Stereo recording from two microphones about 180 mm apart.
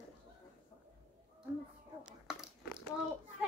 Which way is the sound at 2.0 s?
5° right (ahead or behind).